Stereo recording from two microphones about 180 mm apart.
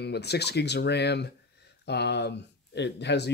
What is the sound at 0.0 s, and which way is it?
Speech, 65° left (ahead or behind).